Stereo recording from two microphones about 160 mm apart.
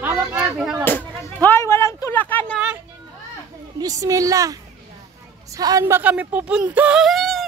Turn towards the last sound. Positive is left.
turn(degrees=0)  # may be behind; listen again after turning